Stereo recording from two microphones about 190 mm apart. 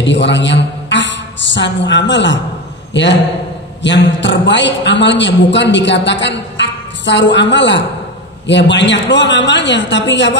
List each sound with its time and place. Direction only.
0.0 s a man's voice: 70° left (ahead or behind)